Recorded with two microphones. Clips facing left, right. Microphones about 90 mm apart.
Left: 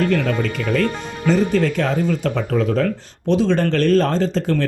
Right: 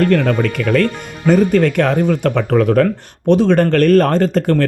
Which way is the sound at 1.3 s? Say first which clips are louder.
Right 5 dB; 55° right (ahead or behind).